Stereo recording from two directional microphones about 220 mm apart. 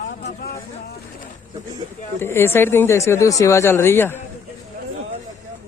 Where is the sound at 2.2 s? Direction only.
10° left (ahead or behind).